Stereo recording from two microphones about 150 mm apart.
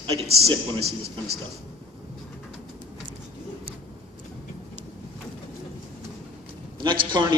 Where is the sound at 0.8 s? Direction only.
90° right.